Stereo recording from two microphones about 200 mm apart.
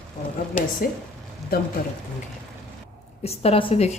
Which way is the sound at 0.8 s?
45° left (ahead or behind).